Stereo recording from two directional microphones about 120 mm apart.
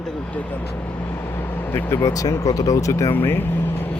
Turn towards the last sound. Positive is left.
turn(degrees=15)  # may be behind; listen again after turning